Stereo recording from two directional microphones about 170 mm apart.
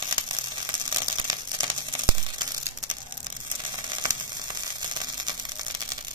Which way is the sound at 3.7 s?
25° right (ahead or behind).